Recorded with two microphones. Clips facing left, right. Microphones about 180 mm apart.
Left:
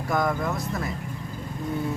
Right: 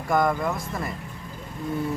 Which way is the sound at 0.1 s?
Centre (ahead or behind).